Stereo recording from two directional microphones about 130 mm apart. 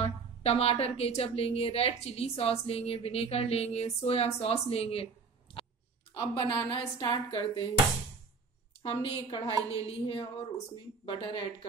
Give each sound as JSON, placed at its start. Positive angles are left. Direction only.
{"t": 0.4, "sound": "a woman's voice", "side_deg": 50}
{"t": 6.1, "sound": "a woman's voice", "side_deg": 30}
{"t": 8.8, "sound": "a woman's voice", "side_deg": 40}